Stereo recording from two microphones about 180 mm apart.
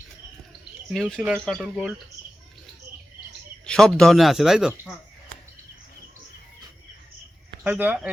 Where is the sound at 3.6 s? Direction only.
5° left (ahead or behind).